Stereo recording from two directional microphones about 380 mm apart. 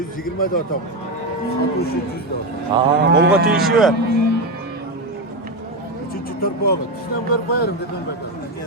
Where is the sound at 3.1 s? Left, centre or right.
Right.